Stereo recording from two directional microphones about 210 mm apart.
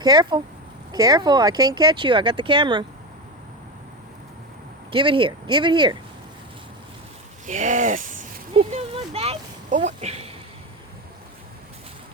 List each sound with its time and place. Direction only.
0.0 s speech: 20° right (ahead or behind)
4.9 s speech: 25° right (ahead or behind)
7.4 s speech: 35° right (ahead or behind)
8.5 s a sound: 30° right (ahead or behind)